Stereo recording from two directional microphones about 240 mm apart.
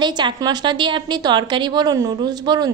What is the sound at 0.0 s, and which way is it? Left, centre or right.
A woman's voice, centre.